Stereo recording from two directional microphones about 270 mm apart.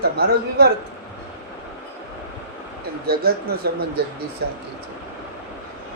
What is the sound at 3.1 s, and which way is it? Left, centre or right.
Speech, right.